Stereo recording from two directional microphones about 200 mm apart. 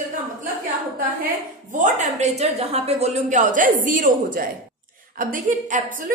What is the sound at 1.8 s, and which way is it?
A woman's voice, 35° right (ahead or behind).